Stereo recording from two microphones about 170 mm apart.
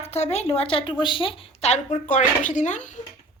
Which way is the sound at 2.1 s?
50° left (ahead or behind).